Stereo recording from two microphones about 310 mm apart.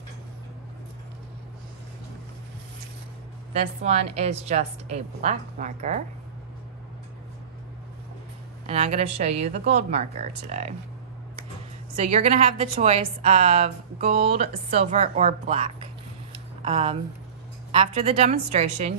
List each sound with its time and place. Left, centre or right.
3.5 s a woman's voice: right
8.6 s a woman's voice: right
12.0 s a woman's voice: right